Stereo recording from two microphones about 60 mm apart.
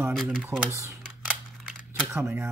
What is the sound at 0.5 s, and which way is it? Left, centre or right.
Speech, right.